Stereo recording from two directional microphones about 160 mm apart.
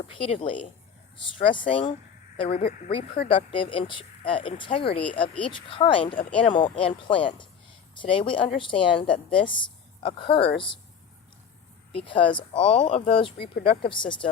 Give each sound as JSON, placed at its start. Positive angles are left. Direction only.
{"t": 0.2, "sound": "speech", "side_deg": 35}
{"t": 11.9, "sound": "speech", "side_deg": 35}